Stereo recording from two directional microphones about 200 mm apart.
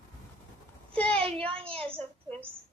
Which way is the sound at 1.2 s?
30° right (ahead or behind).